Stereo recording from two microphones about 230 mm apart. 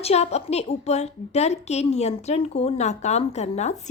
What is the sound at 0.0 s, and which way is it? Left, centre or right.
A woman's voice, left.